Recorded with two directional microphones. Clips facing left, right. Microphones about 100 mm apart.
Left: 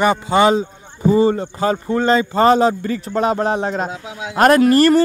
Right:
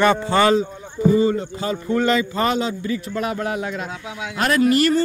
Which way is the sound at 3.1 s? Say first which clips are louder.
Left 9 dB; 30° left (ahead or behind).